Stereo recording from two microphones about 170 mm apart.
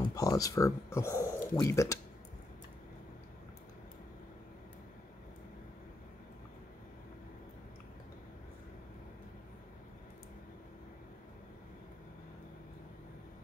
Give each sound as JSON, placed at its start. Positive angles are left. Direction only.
{"t": 0.1, "sound": "speech", "side_deg": 20}